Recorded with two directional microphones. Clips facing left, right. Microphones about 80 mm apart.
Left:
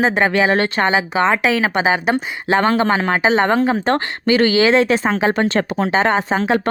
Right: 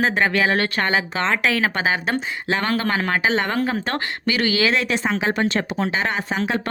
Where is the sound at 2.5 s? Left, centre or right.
Left.